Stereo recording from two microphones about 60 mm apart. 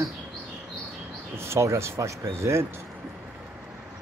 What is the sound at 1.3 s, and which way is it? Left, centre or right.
Speech, right.